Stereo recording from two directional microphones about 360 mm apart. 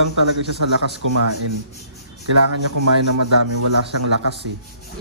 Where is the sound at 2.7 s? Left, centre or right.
Right.